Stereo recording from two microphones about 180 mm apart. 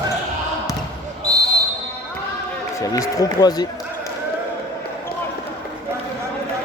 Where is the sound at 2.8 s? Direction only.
20° left (ahead or behind).